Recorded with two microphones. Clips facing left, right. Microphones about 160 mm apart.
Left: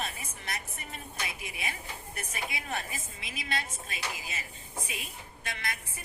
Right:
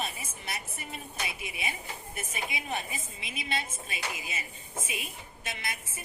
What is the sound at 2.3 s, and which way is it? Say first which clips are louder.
A woman's voice: right 1 dB; 20° right (ahead or behind).